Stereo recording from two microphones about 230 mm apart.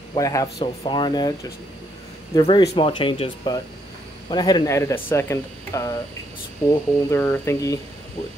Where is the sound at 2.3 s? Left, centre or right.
Centre.